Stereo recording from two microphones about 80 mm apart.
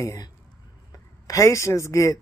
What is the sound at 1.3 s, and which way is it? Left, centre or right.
Speech, left.